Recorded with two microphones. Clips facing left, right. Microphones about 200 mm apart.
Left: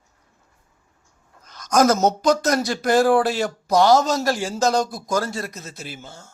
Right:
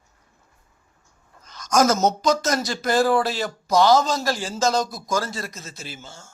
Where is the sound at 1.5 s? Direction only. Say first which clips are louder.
Left 2 dB; 55° left (ahead or behind).